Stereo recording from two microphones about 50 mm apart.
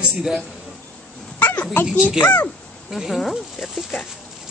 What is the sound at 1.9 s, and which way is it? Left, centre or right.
Speech, centre.